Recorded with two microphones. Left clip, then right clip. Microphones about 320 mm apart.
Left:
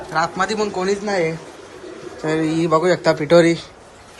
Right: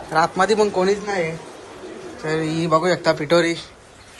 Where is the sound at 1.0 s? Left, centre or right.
Centre.